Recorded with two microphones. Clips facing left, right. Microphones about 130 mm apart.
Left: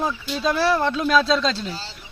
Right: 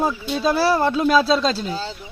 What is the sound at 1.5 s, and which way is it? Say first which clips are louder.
Speech: right 4 dB; 40° right (ahead or behind).